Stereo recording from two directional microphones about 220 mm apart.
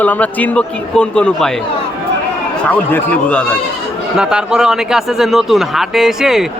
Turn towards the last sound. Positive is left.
turn(degrees=0)  # may be behind; listen again after turning